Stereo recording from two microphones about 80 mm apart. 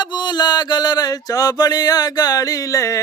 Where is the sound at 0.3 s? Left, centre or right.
Left.